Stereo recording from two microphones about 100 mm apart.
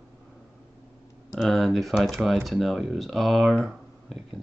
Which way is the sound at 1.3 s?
Centre (ahead or behind).